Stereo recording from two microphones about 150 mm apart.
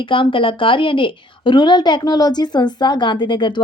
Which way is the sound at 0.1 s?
35° left (ahead or behind).